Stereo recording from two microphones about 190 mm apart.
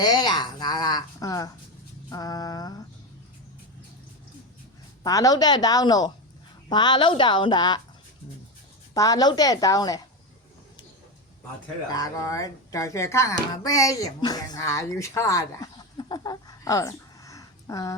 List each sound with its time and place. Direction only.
0.0 s a sound: 20° left (ahead or behind)
5.0 s speech: 20° left (ahead or behind)
9.0 s speech: 20° left (ahead or behind)
11.9 s speech: 20° left (ahead or behind)